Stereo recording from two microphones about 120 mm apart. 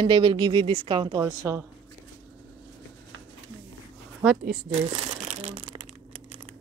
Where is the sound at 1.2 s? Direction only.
25° right (ahead or behind).